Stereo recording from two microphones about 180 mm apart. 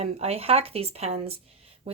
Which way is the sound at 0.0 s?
35° right (ahead or behind).